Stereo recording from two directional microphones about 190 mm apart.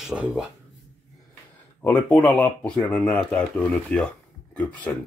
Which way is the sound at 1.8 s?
10° left (ahead or behind).